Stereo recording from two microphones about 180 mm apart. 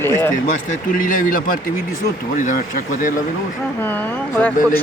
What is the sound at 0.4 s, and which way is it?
Speech, 45° left (ahead or behind).